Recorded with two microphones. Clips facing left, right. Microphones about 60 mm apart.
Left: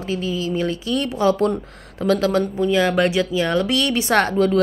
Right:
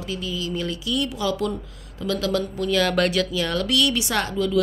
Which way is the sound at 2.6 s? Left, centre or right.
Left.